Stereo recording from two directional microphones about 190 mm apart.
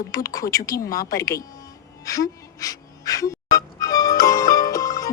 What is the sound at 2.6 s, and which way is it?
Music, 20° left (ahead or behind).